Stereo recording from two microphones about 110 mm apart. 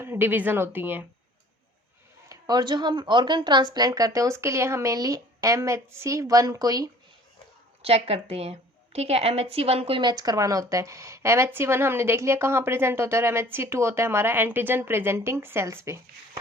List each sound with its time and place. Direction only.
0.0 s a woman's voice: 20° right (ahead or behind)
2.3 s speech: 40° right (ahead or behind)
7.8 s a woman's voice: 65° right (ahead or behind)
10.0 s a woman's voice: 40° right (ahead or behind); by 16.4 s 25° right (ahead or behind)